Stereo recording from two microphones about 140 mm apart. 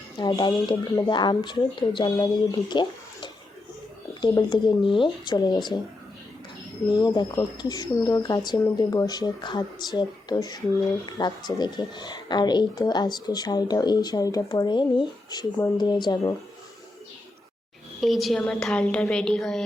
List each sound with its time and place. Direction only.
0.2 s speech: 30° left (ahead or behind)
6.9 s a woman's voice: 30° left (ahead or behind)
18.0 s a woman's voice: centre (ahead or behind)